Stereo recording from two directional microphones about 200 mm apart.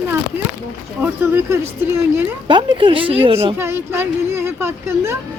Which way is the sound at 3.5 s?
10° right (ahead or behind).